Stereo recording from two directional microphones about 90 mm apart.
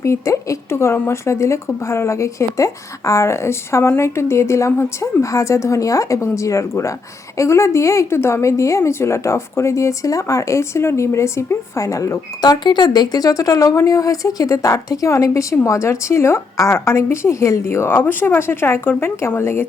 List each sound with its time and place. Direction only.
0.0 s speech: 35° left (ahead or behind)
12.4 s a woman's voice: 50° left (ahead or behind); by 19.6 s 25° left (ahead or behind)